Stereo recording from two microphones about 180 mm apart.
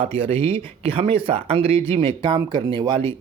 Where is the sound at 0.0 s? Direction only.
30° right (ahead or behind).